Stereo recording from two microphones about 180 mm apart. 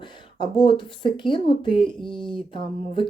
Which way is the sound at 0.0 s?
25° left (ahead or behind).